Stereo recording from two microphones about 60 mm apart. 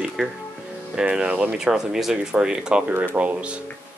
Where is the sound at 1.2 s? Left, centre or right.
Right.